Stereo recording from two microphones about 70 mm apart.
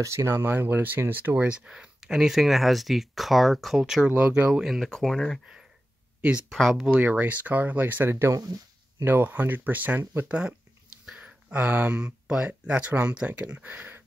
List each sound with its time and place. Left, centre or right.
0.0 s speech: right
1.6 s speech: centre
4.1 s speech: right
4.9 s speech: centre
6.9 s speech: right
8.3 s speech: right
9.0 s speech: right